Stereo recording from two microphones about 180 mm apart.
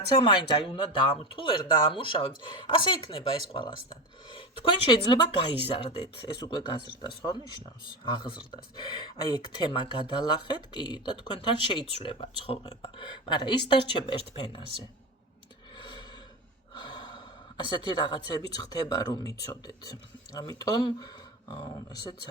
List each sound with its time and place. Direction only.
0.1 s speech: 25° left (ahead or behind)
8.7 s speech: 25° left (ahead or behind)
15.8 s a sound: 25° left (ahead or behind)
16.7 s speech: 25° left (ahead or behind)